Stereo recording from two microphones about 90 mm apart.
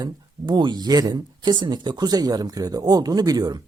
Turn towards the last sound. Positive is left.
turn(degrees=-45)  # may be behind; listen again after turning